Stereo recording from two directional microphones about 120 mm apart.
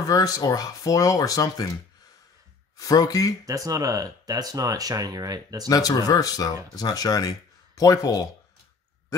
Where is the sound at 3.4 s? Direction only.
30° right (ahead or behind).